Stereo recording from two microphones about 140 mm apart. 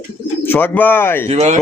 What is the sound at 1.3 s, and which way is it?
Speech, 50° right (ahead or behind).